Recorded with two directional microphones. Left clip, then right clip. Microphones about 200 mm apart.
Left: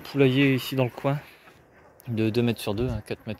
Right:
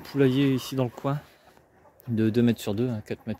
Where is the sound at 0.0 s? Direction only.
25° right (ahead or behind).